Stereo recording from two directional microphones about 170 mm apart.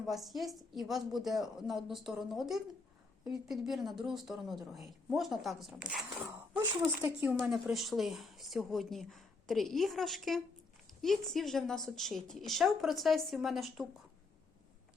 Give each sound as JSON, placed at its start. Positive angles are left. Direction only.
{"t": 0.0, "sound": "speech", "side_deg": 0}
{"t": 7.3, "sound": "speech", "side_deg": 0}